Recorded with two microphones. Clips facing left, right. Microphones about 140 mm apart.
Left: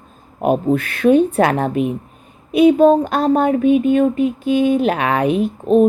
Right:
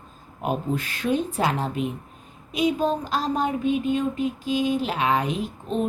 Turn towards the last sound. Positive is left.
turn(degrees=55)  # may be behind; listen again after turning